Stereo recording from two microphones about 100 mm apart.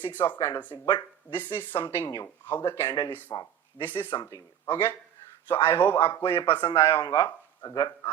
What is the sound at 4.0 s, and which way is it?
A man's voice, 25° left (ahead or behind).